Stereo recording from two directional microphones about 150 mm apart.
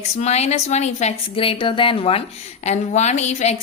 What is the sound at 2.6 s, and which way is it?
Speech, 50° left (ahead or behind).